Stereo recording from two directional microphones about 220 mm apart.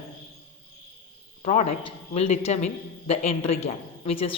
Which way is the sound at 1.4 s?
35° left (ahead or behind).